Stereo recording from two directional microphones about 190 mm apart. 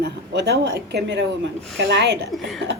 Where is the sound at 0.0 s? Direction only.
65° right (ahead or behind).